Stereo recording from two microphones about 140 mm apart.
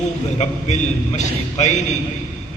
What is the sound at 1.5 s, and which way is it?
Speech, 55° left (ahead or behind).